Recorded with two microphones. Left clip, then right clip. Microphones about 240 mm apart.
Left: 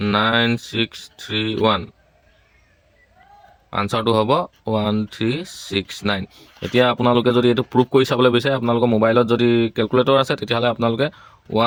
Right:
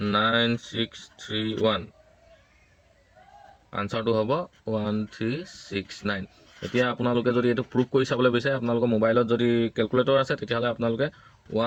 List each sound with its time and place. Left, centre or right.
0.0 s speech: left
3.7 s speech: left